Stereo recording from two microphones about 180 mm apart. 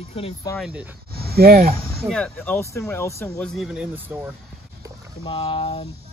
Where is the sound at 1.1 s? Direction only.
60° right (ahead or behind).